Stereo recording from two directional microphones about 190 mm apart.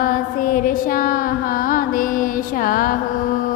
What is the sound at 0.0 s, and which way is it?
Music, 50° left (ahead or behind).